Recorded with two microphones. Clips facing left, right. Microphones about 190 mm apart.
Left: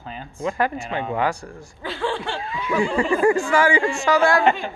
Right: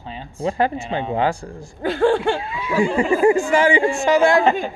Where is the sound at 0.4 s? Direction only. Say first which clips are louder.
Right 3 dB; 30° right (ahead or behind).